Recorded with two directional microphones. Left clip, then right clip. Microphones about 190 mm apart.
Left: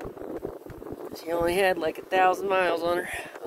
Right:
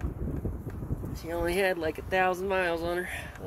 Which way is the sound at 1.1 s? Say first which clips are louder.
Left 4 dB; 25° left (ahead or behind).